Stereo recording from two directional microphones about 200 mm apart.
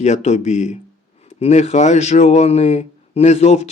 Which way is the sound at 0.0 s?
35° left (ahead or behind).